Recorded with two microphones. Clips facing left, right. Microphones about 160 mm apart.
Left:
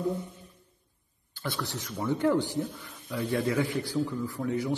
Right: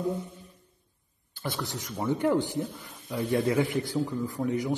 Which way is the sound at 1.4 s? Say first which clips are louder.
Right 1 dB; 20° right (ahead or behind).